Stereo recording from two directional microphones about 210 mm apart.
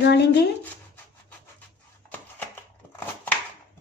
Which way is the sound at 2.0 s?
10° left (ahead or behind).